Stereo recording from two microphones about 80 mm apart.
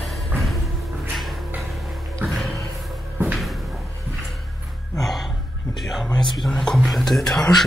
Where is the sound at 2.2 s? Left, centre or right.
Centre.